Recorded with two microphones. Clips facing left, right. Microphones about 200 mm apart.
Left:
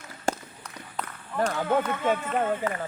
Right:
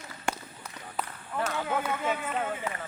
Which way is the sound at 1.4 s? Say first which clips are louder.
Left 5 dB; 40° left (ahead or behind).